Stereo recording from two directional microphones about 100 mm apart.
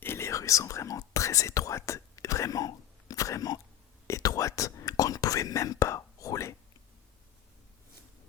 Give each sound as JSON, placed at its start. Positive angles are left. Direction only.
{"t": 0.0, "sound": "whispering", "side_deg": 25}